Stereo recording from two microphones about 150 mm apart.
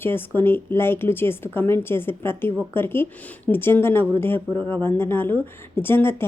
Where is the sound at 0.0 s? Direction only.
15° left (ahead or behind).